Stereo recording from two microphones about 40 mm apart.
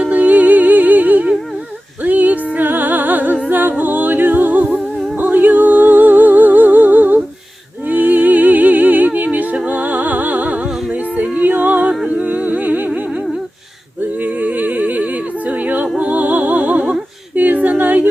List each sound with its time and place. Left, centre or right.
0.0 s music: right
7.9 s humming: right
9.6 s music: right
12.0 s humming: right
14.2 s humming: right
17.3 s a capella: right